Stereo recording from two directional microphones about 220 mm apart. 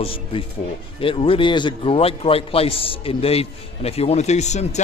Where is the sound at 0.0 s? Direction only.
25° left (ahead or behind).